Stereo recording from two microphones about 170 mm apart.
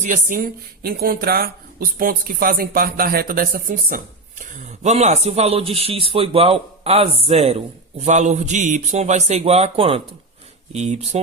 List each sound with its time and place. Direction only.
0.0 s speech: 50° right (ahead or behind)